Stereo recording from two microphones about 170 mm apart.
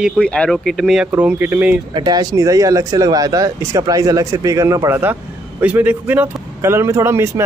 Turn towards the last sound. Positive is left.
turn(degrees=-15)  # may be behind; listen again after turning